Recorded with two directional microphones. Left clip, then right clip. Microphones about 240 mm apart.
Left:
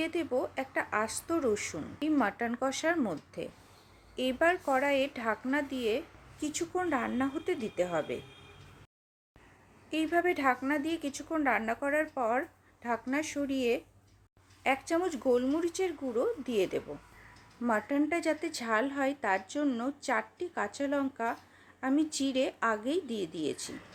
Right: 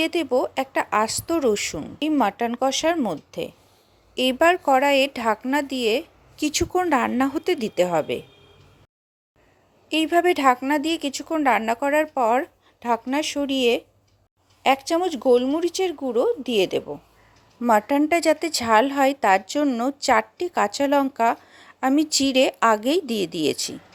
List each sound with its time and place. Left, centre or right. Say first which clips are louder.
0.0 s speech: right 10 dB; right
9.9 s speech: right 10 dB; right